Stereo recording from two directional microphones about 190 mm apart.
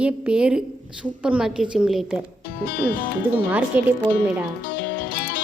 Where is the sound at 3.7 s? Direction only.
10° right (ahead or behind).